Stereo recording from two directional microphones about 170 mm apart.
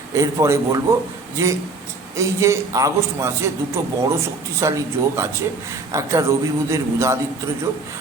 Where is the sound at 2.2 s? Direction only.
15° right (ahead or behind).